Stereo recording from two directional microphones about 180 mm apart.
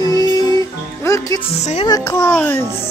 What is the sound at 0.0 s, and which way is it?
Music, 20° left (ahead or behind).